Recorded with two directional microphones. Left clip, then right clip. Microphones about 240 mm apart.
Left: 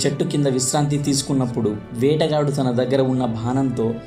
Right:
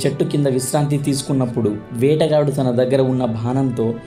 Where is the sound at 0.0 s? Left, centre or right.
Centre.